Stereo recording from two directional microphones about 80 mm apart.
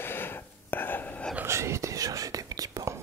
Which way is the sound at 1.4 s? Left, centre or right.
Right.